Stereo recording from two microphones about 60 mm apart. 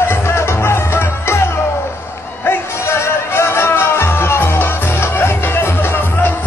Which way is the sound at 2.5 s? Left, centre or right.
Left.